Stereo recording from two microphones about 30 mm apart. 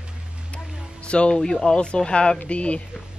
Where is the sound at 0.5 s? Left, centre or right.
Left.